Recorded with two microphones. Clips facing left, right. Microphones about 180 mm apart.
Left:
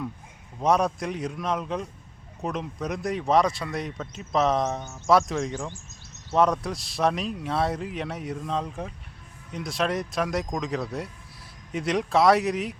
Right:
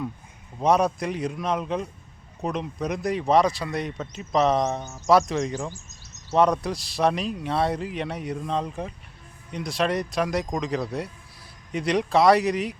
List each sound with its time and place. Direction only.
0.6 s speech: centre (ahead or behind)